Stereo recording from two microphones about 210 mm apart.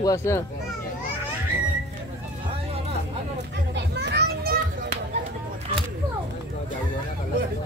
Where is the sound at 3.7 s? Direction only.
55° right (ahead or behind).